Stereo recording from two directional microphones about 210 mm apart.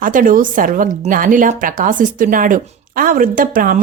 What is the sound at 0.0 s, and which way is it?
A woman's voice, 40° right (ahead or behind).